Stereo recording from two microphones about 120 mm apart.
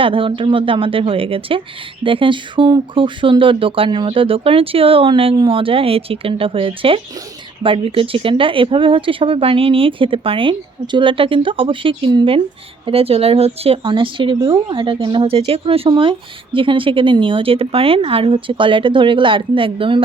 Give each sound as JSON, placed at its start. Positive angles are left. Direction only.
{"t": 0.0, "sound": "speech", "side_deg": -45}